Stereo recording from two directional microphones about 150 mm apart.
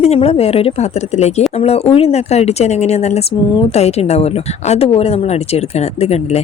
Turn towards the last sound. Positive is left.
turn(degrees=45)  # may be behind; listen again after turning